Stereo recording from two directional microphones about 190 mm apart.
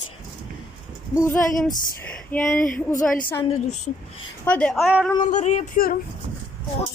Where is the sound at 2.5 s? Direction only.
45° left (ahead or behind).